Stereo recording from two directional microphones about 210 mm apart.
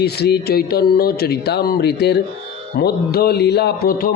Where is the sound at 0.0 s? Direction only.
50° left (ahead or behind).